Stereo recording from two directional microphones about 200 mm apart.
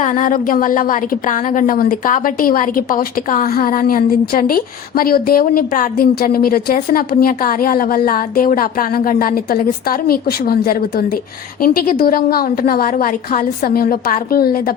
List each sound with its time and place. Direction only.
0.0 s a woman's voice: 40° left (ahead or behind)